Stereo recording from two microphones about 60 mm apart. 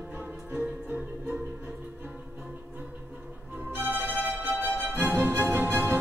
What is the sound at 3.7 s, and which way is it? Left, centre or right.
Music, right.